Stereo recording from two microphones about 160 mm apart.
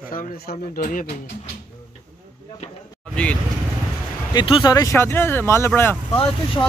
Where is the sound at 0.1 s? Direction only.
65° left (ahead or behind).